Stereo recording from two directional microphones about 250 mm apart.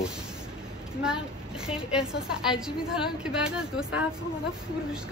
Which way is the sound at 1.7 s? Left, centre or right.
Centre.